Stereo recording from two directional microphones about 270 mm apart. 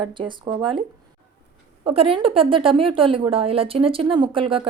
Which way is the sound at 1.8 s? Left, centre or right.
Right.